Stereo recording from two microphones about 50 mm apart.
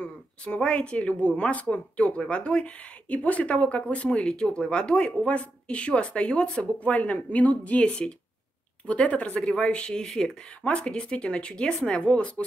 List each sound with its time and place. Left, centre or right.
0.0 s speech: left